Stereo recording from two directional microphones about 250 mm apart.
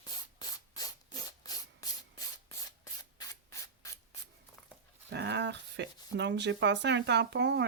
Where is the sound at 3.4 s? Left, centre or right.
Centre.